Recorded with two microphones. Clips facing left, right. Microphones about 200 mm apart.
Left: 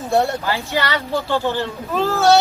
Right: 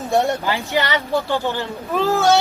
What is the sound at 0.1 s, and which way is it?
Speech, 15° right (ahead or behind).